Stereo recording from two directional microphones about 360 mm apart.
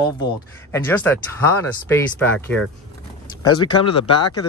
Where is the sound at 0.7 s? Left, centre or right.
Centre.